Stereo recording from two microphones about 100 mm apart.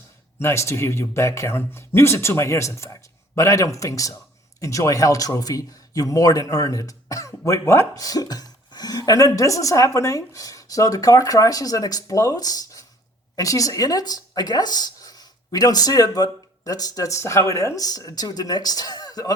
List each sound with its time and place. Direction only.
0.3 s speech: 30° left (ahead or behind)
8.0 s speech: 40° left (ahead or behind)